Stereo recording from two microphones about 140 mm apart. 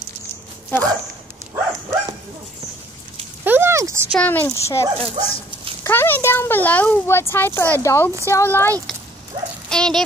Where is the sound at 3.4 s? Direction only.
15° right (ahead or behind).